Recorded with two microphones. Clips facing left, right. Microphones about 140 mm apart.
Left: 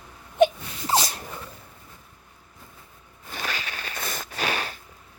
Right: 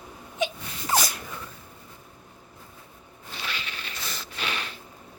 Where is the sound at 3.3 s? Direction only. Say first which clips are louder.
Left 4 dB; 40° left (ahead or behind).